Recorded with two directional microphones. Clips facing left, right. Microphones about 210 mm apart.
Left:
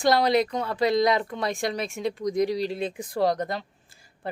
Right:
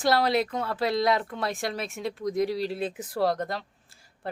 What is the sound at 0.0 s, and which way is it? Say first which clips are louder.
Speech: left 3 dB; 5° right (ahead or behind).